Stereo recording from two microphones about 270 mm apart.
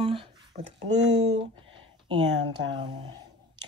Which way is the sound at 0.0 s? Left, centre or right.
Centre.